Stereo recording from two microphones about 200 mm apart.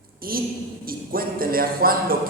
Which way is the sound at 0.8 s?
45° right (ahead or behind).